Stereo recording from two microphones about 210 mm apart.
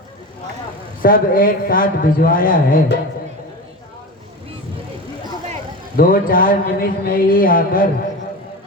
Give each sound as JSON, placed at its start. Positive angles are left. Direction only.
{"t": 1.0, "sound": "a man's voice", "side_deg": 45}
{"t": 6.0, "sound": "a man's voice", "side_deg": 40}